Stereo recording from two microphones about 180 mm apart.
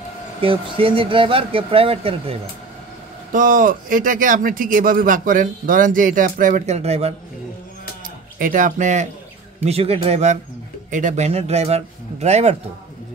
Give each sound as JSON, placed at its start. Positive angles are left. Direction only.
{"t": 0.4, "sound": "speech", "side_deg": -30}
{"t": 3.3, "sound": "speech", "side_deg": -45}
{"t": 8.4, "sound": "speech", "side_deg": -50}